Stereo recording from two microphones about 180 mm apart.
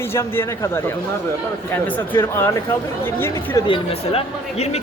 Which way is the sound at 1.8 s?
10° left (ahead or behind).